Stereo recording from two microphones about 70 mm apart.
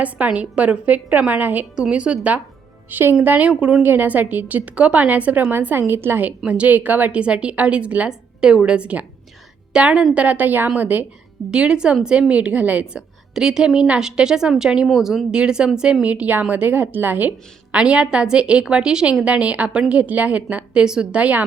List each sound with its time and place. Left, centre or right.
0.0 s a woman's voice: centre
1.7 s a woman's voice: centre
2.9 s a woman's voice: right
3.5 s a woman's voice: centre
3.8 s a woman's voice: right
10.2 s a woman's voice: right
11.5 s a woman's voice: centre
12.8 s a woman's voice: centre; by 17.7 s right
17.7 s a woman's voice: centre